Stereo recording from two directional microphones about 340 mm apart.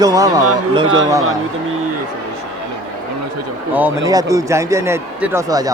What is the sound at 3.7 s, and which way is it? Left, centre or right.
Speech, centre.